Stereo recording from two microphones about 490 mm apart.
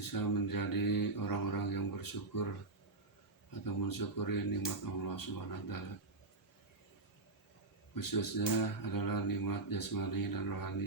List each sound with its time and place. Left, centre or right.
0.0 s speech: left
3.7 s speech: left
7.9 s speech: left